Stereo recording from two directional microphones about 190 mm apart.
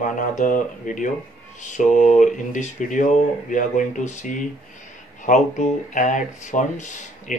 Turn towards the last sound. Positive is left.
turn(degrees=40)  # may be behind; listen again after turning